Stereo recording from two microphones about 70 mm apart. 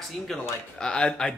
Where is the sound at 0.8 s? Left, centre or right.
Centre.